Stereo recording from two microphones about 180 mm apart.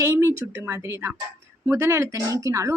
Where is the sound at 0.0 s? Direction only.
15° right (ahead or behind).